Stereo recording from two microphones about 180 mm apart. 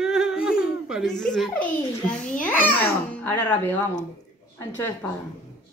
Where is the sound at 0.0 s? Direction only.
Centre (ahead or behind).